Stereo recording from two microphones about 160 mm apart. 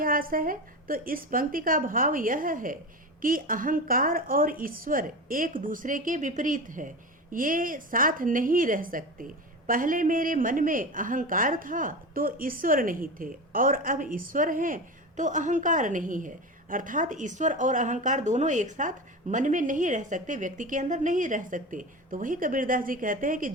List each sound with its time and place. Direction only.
0.0 s a woman's voice: 60° right (ahead or behind)